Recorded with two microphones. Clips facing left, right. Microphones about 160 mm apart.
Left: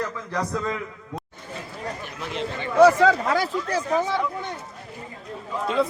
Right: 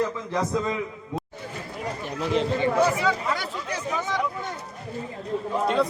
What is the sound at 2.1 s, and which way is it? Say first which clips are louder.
Speech: right 9 dB; 40° right (ahead or behind).